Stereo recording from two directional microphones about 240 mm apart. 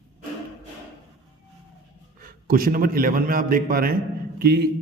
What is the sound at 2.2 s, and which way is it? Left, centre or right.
A man's voice, right.